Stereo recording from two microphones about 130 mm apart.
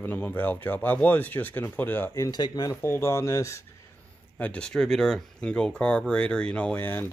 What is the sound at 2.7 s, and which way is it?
Speech, 20° left (ahead or behind).